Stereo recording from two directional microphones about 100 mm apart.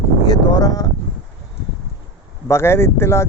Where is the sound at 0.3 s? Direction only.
45° left (ahead or behind).